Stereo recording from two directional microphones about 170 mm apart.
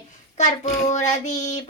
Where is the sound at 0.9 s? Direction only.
45° left (ahead or behind).